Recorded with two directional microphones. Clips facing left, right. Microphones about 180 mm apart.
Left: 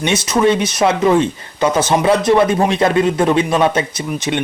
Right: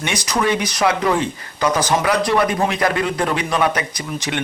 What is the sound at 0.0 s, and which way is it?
A man's voice, 25° left (ahead or behind).